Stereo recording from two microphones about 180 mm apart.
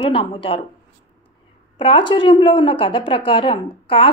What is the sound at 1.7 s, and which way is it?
A woman's voice, 30° left (ahead or behind).